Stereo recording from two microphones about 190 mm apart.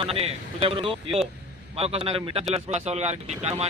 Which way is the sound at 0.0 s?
30° right (ahead or behind).